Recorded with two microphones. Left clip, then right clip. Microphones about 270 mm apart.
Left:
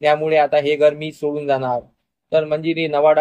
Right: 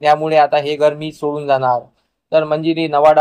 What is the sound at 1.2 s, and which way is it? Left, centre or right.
Speech, right.